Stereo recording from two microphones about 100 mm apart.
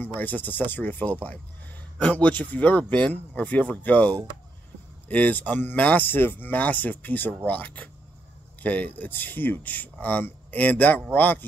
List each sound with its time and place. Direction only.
0.0 s speech: 15° left (ahead or behind)